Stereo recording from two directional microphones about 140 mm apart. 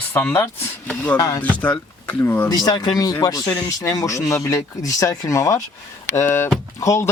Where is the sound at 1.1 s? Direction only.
25° left (ahead or behind).